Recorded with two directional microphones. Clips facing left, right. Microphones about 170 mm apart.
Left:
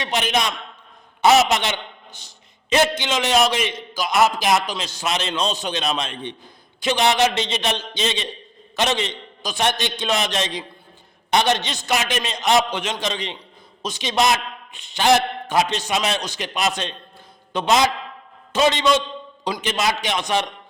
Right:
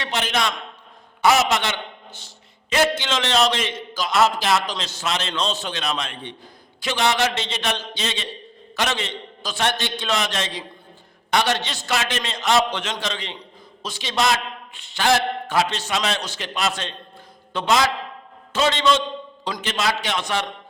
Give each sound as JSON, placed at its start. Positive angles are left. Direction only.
{"t": 0.0, "sound": "a man's voice", "side_deg": 15}